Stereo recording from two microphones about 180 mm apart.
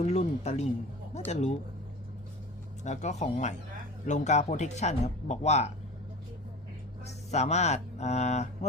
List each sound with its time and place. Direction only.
0.0 s a sound: 35° left (ahead or behind)
1.3 s speech: 40° left (ahead or behind)
2.8 s speech: 40° left (ahead or behind)
7.0 s speech: 35° left (ahead or behind)